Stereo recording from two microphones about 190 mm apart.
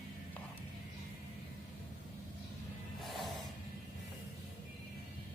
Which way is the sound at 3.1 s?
Centre (ahead or behind).